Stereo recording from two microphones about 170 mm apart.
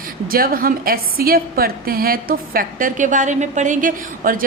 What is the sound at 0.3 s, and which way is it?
A woman's voice, 60° right (ahead or behind).